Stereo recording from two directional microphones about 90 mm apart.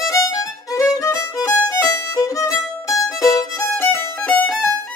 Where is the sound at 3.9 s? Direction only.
20° left (ahead or behind).